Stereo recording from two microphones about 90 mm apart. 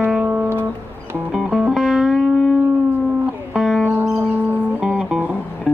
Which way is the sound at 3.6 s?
Centre (ahead or behind).